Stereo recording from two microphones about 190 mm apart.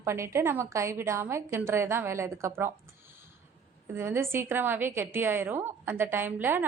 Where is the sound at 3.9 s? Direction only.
10° right (ahead or behind).